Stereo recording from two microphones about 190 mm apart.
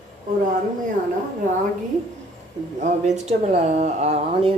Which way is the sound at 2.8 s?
40° right (ahead or behind).